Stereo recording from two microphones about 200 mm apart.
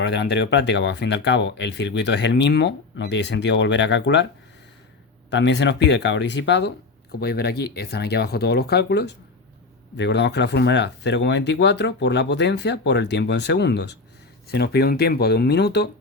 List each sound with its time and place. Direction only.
0.0 s speech: 60° left (ahead or behind)
5.3 s speech: 60° left (ahead or behind)